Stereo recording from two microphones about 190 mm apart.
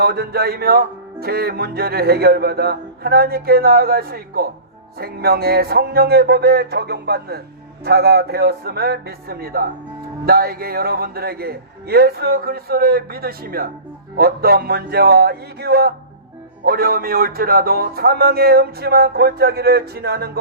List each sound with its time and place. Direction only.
0.0 s music: 55° right (ahead or behind)